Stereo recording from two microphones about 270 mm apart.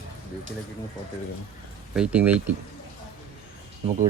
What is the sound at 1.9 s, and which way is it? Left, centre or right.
Speech, centre.